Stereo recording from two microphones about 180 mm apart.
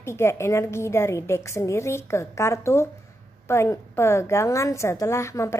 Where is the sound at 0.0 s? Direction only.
15° left (ahead or behind).